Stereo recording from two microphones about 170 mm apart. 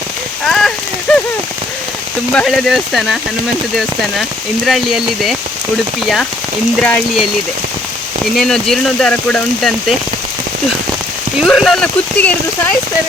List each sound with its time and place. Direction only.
0.4 s rain on surface: 5° left (ahead or behind)
2.3 s speech: centre (ahead or behind)
6.7 s speech: 5° left (ahead or behind)
11.4 s speech: centre (ahead or behind)